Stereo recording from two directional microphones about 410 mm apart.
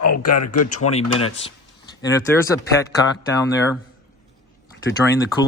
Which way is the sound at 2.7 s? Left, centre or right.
Centre.